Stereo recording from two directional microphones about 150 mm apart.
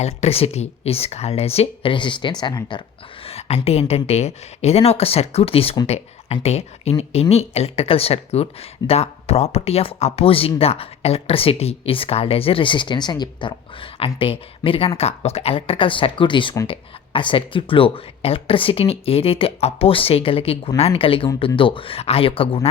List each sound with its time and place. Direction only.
0.0 s speech: 45° left (ahead or behind)
3.2 s speech: 45° left (ahead or behind)